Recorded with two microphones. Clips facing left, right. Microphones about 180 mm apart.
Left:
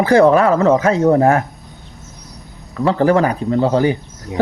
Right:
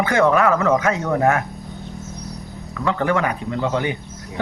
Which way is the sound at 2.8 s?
35° left (ahead or behind).